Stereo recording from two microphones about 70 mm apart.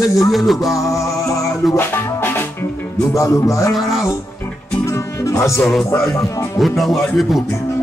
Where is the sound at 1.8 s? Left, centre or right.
Left.